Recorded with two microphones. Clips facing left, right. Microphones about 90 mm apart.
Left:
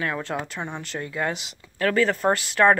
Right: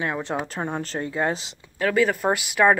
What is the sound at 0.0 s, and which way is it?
Speech, 20° right (ahead or behind).